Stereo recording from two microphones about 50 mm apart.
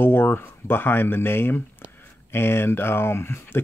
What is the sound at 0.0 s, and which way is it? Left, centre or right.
Speech, left.